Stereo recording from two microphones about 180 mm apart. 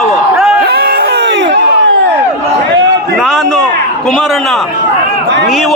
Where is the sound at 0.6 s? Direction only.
60° right (ahead or behind); by 1.5 s 80° right.